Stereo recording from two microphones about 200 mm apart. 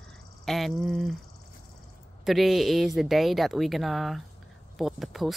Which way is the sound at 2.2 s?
Centre (ahead or behind).